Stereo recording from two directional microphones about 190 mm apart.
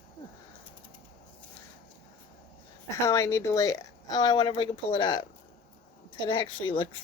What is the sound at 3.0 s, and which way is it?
Speech, 15° left (ahead or behind).